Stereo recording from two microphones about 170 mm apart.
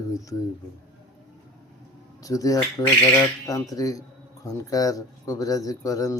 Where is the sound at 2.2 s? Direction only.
20° left (ahead or behind).